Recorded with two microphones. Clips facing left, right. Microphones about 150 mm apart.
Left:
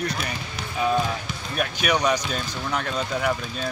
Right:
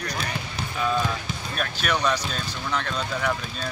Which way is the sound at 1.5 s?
10° left (ahead or behind).